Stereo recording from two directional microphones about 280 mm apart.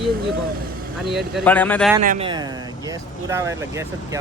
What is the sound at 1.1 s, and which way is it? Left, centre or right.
Speech, centre.